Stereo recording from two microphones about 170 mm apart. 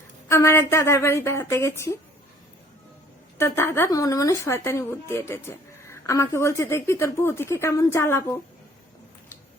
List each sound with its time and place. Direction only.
0.3 s speech: 15° left (ahead or behind)
3.3 s speech: 15° left (ahead or behind)